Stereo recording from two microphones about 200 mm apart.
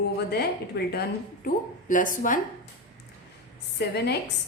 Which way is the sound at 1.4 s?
40° left (ahead or behind).